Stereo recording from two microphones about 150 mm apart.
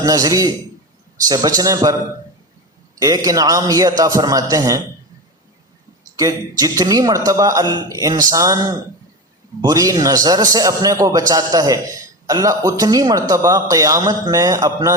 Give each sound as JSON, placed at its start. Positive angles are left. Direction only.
{"t": 0.0, "sound": "speech", "side_deg": -25}
{"t": 3.0, "sound": "speech", "side_deg": -25}
{"t": 6.6, "sound": "speech", "side_deg": -25}